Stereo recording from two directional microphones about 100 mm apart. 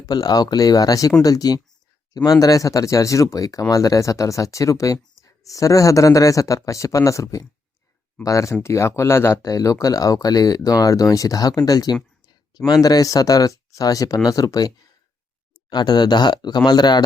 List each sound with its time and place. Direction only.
0.0 s speech: 40° left (ahead or behind)
15.7 s speech: 45° left (ahead or behind)